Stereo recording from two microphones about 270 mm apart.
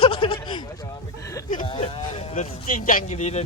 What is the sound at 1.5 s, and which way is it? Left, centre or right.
Speech, left.